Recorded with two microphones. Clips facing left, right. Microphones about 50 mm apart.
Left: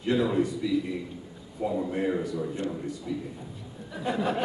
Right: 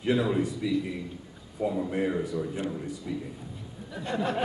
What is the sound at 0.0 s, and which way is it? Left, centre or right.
A man's voice, centre.